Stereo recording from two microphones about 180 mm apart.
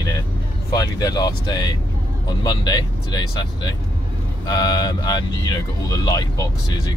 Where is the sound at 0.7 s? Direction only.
20° left (ahead or behind).